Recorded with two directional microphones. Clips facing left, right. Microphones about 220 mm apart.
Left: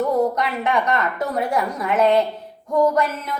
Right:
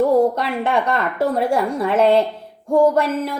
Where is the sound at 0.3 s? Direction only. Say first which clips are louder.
Right 1 dB; 30° right (ahead or behind).